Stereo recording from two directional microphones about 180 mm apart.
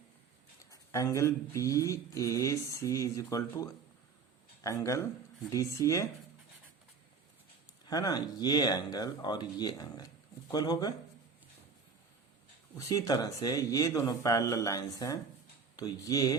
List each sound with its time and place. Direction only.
0.7 s speech: 20° left (ahead or behind)
7.9 s speech: 20° left (ahead or behind)
12.7 s speech: 20° left (ahead or behind)